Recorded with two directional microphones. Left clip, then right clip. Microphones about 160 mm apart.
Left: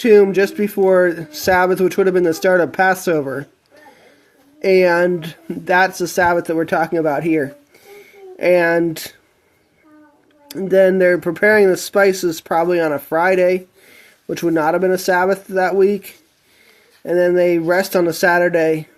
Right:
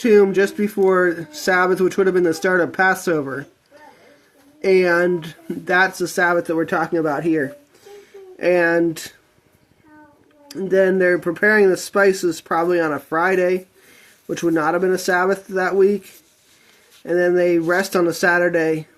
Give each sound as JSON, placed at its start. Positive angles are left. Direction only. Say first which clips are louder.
{"t": 0.0, "sound": "speech", "louder": "left 3 dB", "side_deg": 25}
{"t": 4.6, "sound": "speech", "louder": "left 3 dB", "side_deg": 30}
{"t": 10.5, "sound": "speech", "louder": "left 4 dB", "side_deg": 35}